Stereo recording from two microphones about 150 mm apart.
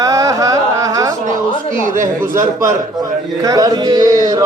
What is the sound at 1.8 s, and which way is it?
Speech, 65° right (ahead or behind).